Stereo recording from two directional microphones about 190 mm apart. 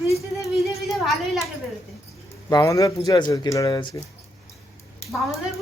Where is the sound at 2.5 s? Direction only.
15° left (ahead or behind).